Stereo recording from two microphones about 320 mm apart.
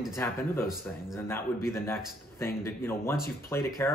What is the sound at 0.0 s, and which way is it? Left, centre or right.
Speech, centre.